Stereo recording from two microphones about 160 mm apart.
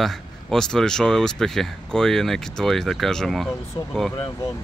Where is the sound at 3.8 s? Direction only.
25° left (ahead or behind).